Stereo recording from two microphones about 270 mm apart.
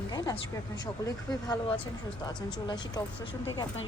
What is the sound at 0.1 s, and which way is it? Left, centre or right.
Speech, centre.